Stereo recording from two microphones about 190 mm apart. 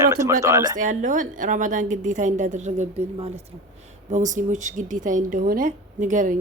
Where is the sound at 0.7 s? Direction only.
40° right (ahead or behind).